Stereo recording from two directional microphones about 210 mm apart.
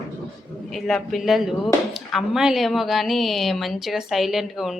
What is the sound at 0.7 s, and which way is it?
Speech, centre (ahead or behind).